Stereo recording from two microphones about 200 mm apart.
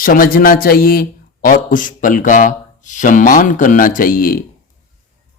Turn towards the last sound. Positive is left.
turn(degrees=45)  # may be behind; listen again after turning